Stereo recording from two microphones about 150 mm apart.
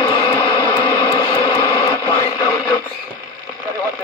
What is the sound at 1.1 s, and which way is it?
Radio, 20° left (ahead or behind).